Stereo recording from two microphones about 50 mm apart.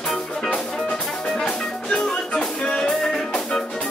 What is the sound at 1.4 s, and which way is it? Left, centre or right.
Music, centre.